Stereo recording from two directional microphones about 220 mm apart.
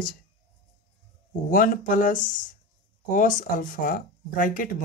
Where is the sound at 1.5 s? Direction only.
40° left (ahead or behind).